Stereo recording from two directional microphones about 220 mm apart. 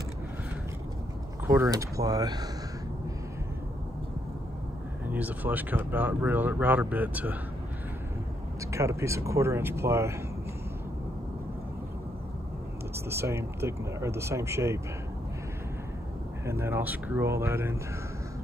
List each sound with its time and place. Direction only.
1.5 s speech: 15° right (ahead or behind)
5.0 s speech: 10° right (ahead or behind)
8.7 s speech: 15° right (ahead or behind)
13.1 s speech: 10° right (ahead or behind)
16.4 s speech: 10° right (ahead or behind)